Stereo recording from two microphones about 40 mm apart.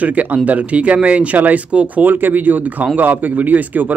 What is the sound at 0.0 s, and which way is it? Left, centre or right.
Speech, right.